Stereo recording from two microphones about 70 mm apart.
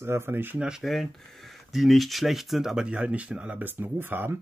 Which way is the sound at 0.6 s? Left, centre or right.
Centre.